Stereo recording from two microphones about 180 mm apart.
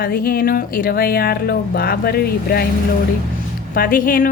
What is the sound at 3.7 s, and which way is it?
Speech, 50° left (ahead or behind).